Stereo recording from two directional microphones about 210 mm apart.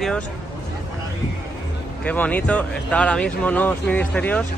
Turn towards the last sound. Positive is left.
turn(degrees=5)  # may be behind; listen again after turning